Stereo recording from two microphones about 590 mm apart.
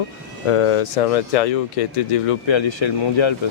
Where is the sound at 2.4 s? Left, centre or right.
Left.